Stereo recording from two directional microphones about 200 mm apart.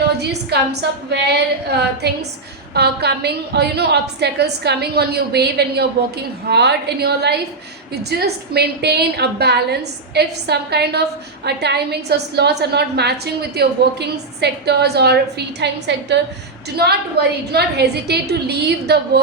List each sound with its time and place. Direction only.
0.2 s a woman's voice: 55° right (ahead or behind)